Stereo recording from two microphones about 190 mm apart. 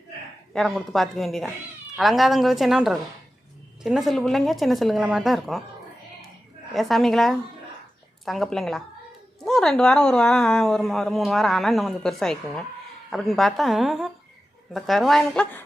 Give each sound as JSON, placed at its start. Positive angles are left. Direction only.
{"t": 0.5, "sound": "a woman's voice", "side_deg": 0}
{"t": 6.7, "sound": "a woman's voice", "side_deg": 0}